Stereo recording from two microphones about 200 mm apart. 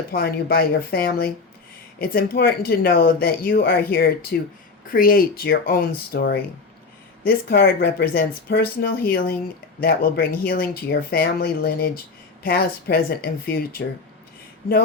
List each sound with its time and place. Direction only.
0.1 s speech: 50° left (ahead or behind)